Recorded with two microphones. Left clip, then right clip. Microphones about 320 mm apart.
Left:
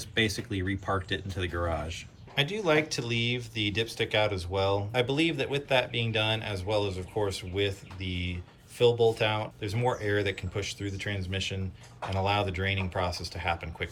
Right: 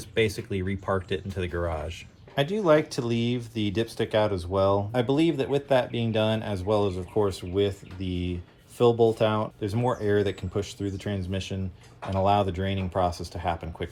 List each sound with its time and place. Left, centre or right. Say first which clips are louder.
0.1 s speech: right 3 dB; centre
2.3 s speech: right 4 dB; centre